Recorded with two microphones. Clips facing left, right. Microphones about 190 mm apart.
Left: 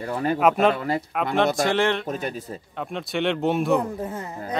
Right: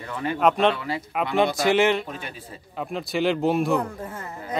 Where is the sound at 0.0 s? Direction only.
40° left (ahead or behind).